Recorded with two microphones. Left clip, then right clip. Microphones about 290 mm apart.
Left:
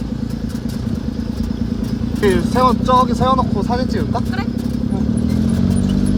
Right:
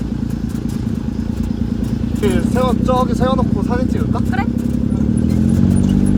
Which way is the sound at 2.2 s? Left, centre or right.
Left.